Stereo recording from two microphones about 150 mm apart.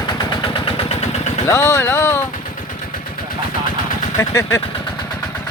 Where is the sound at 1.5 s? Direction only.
20° left (ahead or behind).